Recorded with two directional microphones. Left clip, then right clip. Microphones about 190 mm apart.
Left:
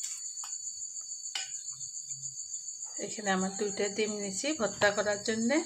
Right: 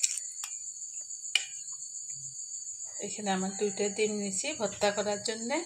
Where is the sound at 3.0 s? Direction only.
35° left (ahead or behind).